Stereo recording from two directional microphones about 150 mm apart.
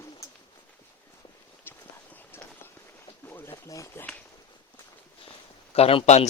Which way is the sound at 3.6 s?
20° left (ahead or behind).